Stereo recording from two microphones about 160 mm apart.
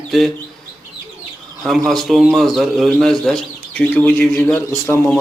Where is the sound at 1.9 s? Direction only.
Centre (ahead or behind).